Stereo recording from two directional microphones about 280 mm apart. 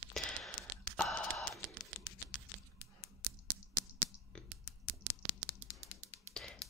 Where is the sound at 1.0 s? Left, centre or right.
Centre.